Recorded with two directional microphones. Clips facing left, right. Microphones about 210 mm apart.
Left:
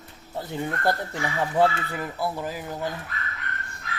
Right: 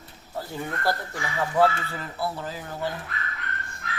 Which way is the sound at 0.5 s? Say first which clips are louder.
Left 3 dB; 20° left (ahead or behind).